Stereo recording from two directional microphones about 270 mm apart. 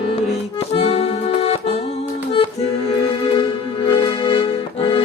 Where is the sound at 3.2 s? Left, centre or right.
Centre.